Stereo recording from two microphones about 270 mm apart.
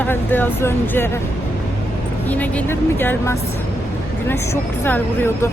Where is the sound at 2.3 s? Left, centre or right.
Centre.